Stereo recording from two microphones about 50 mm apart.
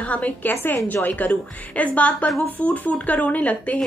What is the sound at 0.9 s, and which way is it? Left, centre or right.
A woman's voice, left.